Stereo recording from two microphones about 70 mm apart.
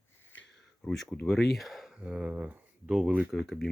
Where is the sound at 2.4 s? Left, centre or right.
Right.